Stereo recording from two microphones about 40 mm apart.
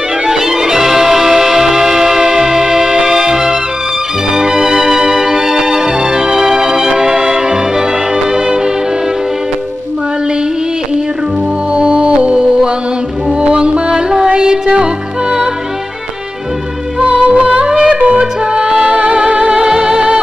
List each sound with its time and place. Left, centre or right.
0.3 s music: centre
11.7 s music: right
17.0 s music: right